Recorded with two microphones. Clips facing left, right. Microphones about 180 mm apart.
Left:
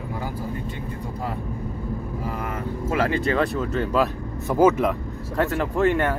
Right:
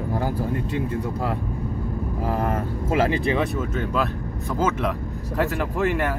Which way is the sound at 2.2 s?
60° right (ahead or behind).